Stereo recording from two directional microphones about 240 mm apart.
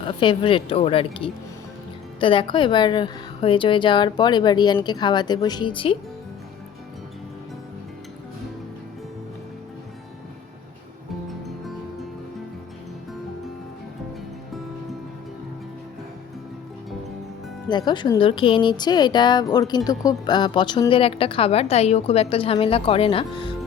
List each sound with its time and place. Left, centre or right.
0.2 s speech: left
11.4 s music: centre
17.7 s speech: centre